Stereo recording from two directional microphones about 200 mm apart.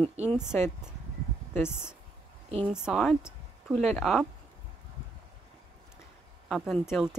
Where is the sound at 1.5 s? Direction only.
10° left (ahead or behind).